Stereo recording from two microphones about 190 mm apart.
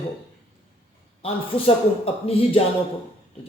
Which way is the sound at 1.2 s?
30° left (ahead or behind).